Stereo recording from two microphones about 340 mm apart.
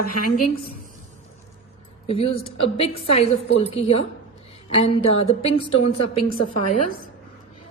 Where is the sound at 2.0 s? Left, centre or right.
Centre.